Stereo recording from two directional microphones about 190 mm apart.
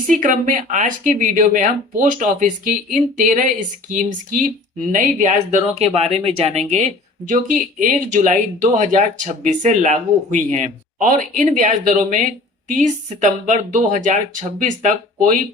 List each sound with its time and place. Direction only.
0.1 s speech: 45° right (ahead or behind)